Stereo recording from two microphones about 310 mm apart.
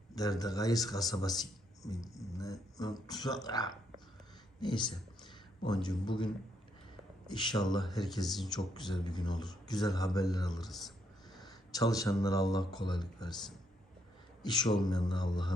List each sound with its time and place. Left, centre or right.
0.2 s a man's voice: centre
7.8 s speech: centre
8.4 s a man's voice: centre
10.5 s speech: centre
11.4 s speech: centre
14.4 s a man's voice: centre